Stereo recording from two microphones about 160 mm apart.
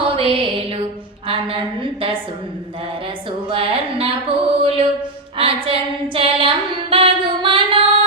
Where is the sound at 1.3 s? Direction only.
35° right (ahead or behind).